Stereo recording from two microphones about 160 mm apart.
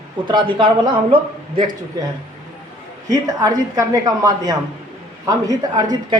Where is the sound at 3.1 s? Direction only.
20° right (ahead or behind).